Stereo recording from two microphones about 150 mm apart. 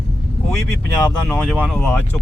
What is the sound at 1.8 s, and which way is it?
Speech, 10° left (ahead or behind).